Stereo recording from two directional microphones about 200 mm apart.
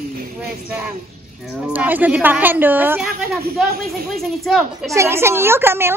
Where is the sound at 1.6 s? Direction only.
10° right (ahead or behind).